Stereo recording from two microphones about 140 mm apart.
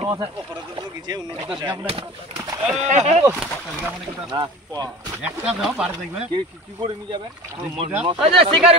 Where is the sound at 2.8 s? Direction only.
55° right (ahead or behind).